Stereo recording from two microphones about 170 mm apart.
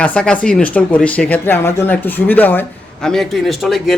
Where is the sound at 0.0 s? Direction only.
5° left (ahead or behind).